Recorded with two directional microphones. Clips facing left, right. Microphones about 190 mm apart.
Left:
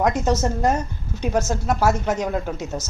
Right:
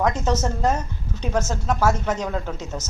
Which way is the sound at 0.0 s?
10° left (ahead or behind).